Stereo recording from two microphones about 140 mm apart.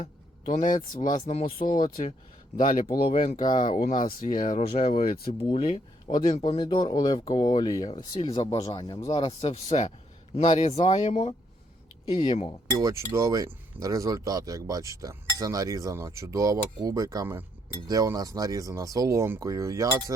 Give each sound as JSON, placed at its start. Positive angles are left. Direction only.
{"t": 0.0, "sound": "a sound", "side_deg": 70}
{"t": 1.2, "sound": "speech", "side_deg": 50}
{"t": 1.6, "sound": "speech", "side_deg": 85}
{"t": 2.6, "sound": "speech", "side_deg": 70}
{"t": 4.2, "sound": "speech", "side_deg": 80}
{"t": 4.9, "sound": "speech", "side_deg": 90}
{"t": 5.5, "sound": "speech", "side_deg": 70}
{"t": 6.1, "sound": "speech", "side_deg": 35}
{"t": 8.2, "sound": "speech", "side_deg": 45}
{"t": 12.7, "sound": "speech", "side_deg": -25}